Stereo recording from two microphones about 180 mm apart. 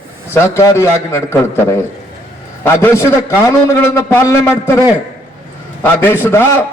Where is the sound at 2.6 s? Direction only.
15° left (ahead or behind).